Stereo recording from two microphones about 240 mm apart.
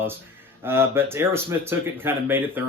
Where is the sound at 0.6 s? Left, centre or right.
Centre.